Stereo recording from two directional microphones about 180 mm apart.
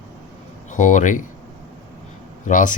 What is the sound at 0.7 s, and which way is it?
Speech, 45° left (ahead or behind).